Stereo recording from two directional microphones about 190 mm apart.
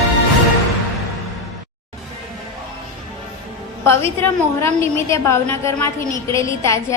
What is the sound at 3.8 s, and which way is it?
A woman's voice, 15° left (ahead or behind).